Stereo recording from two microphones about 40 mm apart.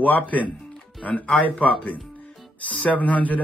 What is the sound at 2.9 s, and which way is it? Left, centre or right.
Speech, left.